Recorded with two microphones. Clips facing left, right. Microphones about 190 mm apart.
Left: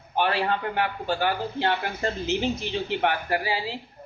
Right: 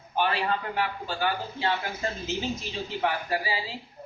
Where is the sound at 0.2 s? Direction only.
60° left (ahead or behind).